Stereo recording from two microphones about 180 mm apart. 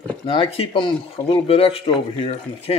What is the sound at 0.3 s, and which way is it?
Speech, 30° left (ahead or behind).